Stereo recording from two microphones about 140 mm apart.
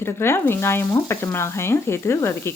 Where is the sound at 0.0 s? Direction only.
15° left (ahead or behind).